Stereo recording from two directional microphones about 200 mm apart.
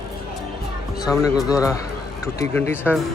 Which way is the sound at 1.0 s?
15° left (ahead or behind).